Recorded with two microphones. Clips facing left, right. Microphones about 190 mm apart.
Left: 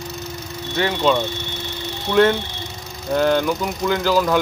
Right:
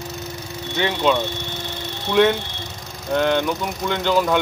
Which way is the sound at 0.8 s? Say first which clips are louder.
Left 1 dB; centre (ahead or behind).